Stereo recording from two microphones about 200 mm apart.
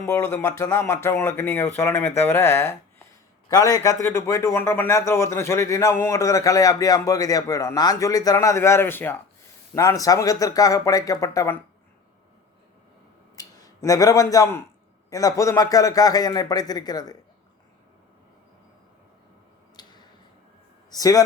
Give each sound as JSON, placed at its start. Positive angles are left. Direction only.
{"t": 0.0, "sound": "a man's voice", "side_deg": 15}
{"t": 13.3, "sound": "a man's voice", "side_deg": 15}
{"t": 19.8, "sound": "tick-tock", "side_deg": 20}
{"t": 20.9, "sound": "a man's voice", "side_deg": 20}